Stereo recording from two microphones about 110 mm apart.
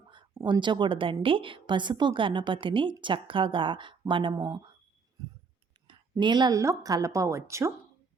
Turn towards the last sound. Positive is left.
turn(degrees=-25)  # may be behind; listen again after turning